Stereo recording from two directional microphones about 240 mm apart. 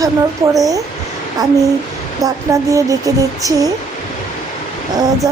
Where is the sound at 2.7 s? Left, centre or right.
Centre.